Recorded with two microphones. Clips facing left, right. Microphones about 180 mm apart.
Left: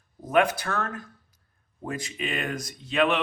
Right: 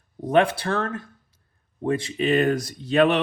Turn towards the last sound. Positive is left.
turn(degrees=-40)  # may be behind; listen again after turning